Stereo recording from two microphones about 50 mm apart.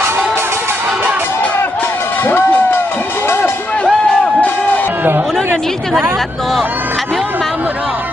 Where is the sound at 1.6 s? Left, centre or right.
Left.